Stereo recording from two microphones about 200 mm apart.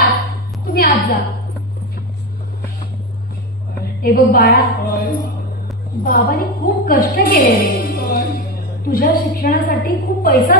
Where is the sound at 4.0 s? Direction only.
50° left (ahead or behind).